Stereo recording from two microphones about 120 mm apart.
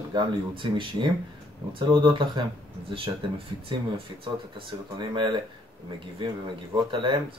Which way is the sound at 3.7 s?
45° right (ahead or behind).